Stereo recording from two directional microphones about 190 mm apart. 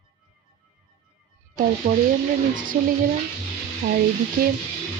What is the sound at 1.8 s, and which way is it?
Speech, 55° right (ahead or behind).